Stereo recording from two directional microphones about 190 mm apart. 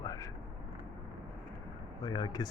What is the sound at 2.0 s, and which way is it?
Speech, 20° left (ahead or behind).